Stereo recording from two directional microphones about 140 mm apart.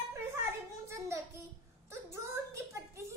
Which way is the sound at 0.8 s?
20° right (ahead or behind).